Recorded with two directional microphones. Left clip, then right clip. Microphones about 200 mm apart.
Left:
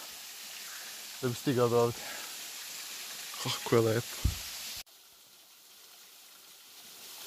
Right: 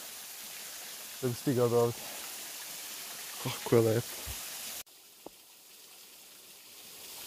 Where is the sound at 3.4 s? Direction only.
Centre (ahead or behind).